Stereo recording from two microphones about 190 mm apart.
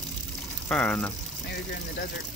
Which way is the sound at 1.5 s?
55° left (ahead or behind).